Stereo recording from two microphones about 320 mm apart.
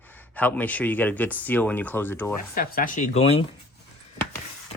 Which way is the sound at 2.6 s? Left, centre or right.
Left.